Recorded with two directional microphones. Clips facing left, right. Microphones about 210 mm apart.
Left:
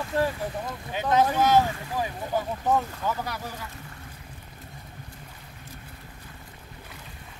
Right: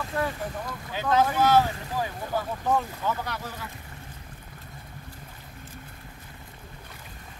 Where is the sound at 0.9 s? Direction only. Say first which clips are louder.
Left 1 dB; 20° left (ahead or behind).